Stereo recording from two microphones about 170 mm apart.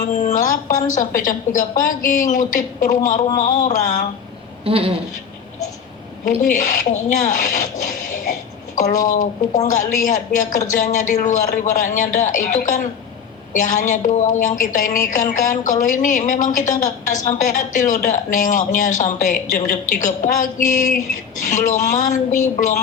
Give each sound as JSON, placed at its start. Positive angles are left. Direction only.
{"t": 0.2, "sound": "a woman's voice", "side_deg": 45}
{"t": 4.6, "sound": "a sound", "side_deg": -35}
{"t": 6.4, "sound": "a woman's voice", "side_deg": 50}